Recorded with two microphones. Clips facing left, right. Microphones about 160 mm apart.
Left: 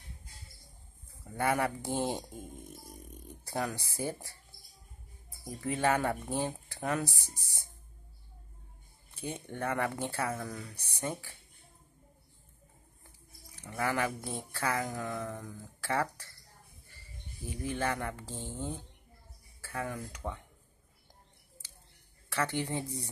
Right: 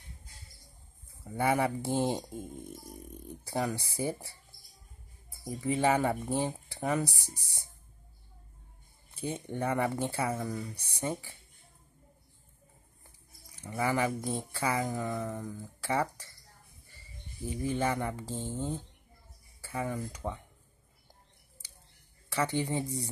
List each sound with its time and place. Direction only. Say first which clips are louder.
1.2 s speech: right 2 dB; 10° right (ahead or behind)
3.4 s speech: right 3 dB; 10° right (ahead or behind)
5.6 s speech: right 2 dB; 10° right (ahead or behind)
9.3 s speech: right 3 dB; 10° right (ahead or behind)
13.6 s speech: right 2 dB; 10° right (ahead or behind)
17.5 s speech: right 3 dB; 10° right (ahead or behind)
22.3 s speech: right 2 dB; 10° right (ahead or behind)